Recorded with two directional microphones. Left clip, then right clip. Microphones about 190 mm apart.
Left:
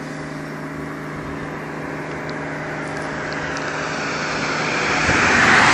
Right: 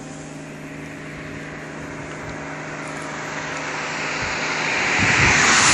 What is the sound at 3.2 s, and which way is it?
Vehicle, 45° left (ahead or behind).